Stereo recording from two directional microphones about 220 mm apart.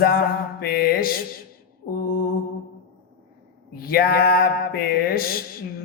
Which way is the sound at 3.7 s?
45° left (ahead or behind).